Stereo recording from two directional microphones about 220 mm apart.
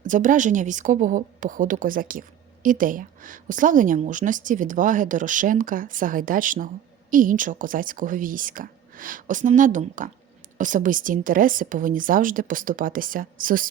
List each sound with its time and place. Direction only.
0.0 s a woman's voice: 35° right (ahead or behind)